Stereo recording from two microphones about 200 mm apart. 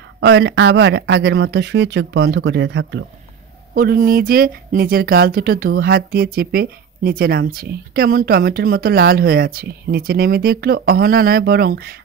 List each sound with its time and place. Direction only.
0.2 s speech: 60° right (ahead or behind)
3.7 s speech: 45° right (ahead or behind)